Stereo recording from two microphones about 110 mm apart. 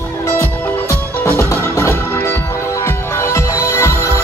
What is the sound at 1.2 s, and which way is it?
Music, 20° left (ahead or behind).